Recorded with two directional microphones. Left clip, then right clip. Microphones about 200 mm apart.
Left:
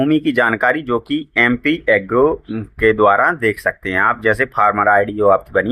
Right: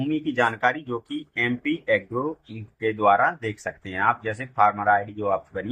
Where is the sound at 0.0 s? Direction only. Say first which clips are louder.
Left 8 dB; 40° left (ahead or behind).